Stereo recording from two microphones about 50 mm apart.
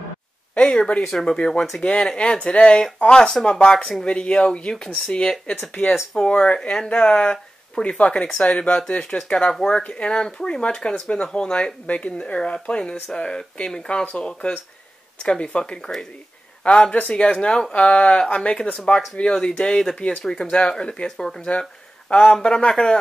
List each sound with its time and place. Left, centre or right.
0.6 s speech: centre
5.7 s speech: left
16.6 s speech: left
20.0 s speech: left
20.5 s speech: centre